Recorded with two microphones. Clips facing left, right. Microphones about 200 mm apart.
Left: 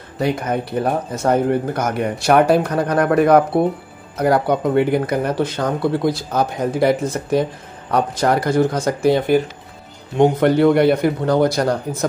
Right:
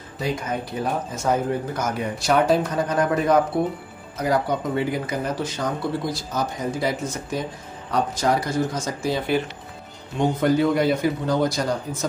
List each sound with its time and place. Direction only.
0.2 s speech: 60° left (ahead or behind)